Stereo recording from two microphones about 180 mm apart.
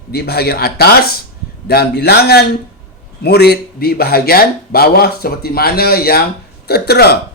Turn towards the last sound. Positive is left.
turn(degrees=60)  # may be behind; listen again after turning